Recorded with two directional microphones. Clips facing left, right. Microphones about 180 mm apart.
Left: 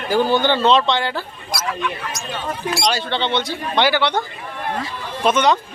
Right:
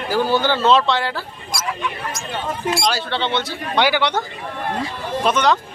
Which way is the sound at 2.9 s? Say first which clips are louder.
Left 1 dB; 5° right (ahead or behind).